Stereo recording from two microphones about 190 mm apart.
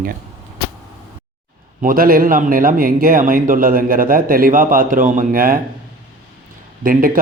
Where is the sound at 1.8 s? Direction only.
50° right (ahead or behind).